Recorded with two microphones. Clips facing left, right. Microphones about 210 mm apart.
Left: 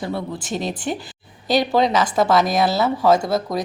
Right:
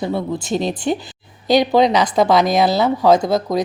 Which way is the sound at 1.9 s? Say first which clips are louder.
Right 3 dB; 20° right (ahead or behind).